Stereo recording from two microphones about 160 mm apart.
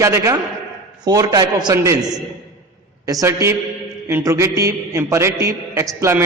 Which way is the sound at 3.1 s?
20° right (ahead or behind).